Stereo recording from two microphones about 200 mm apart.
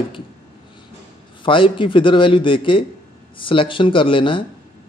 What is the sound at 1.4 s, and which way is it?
Speech, 25° left (ahead or behind).